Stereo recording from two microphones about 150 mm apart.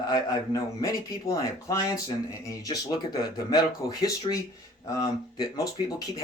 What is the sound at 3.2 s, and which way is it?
Speech, 25° left (ahead or behind).